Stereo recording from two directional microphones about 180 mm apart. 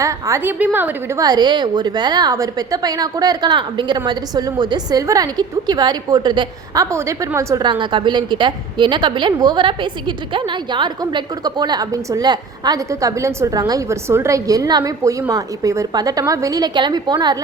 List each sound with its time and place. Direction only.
0.0 s a woman's voice: 15° right (ahead or behind)